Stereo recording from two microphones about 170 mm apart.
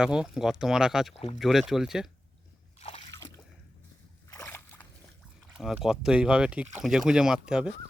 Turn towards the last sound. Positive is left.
turn(degrees=-5)  # may be behind; listen again after turning